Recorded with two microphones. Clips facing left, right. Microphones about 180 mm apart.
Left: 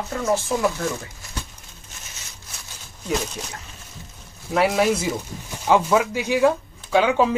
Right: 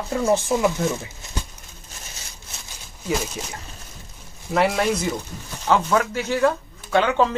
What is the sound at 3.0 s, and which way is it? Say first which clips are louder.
Speech: even; 5° right (ahead or behind).